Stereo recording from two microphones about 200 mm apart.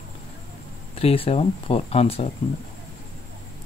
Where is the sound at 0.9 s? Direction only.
30° left (ahead or behind).